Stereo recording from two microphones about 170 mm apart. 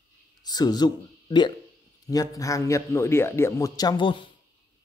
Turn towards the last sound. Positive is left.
turn(degrees=30)  # may be behind; listen again after turning